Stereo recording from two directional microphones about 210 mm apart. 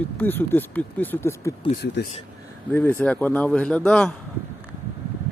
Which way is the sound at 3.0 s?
5° left (ahead or behind).